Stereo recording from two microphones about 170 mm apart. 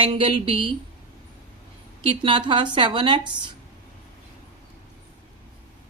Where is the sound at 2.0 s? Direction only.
30° right (ahead or behind).